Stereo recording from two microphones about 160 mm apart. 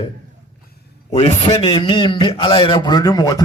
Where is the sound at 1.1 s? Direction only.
40° left (ahead or behind).